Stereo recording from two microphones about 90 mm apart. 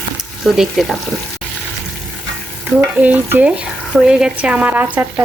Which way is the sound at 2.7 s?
15° right (ahead or behind).